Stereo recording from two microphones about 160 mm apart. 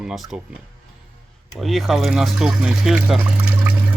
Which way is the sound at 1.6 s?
Centre (ahead or behind).